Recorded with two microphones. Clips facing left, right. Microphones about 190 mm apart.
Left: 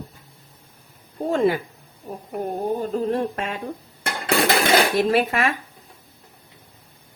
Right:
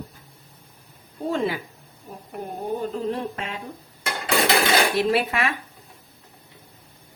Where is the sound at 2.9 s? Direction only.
45° left (ahead or behind).